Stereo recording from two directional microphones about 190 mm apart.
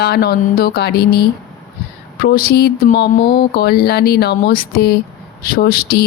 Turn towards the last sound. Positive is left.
turn(degrees=50)  # may be behind; listen again after turning